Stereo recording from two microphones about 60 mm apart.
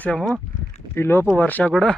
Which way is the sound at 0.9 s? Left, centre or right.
Left.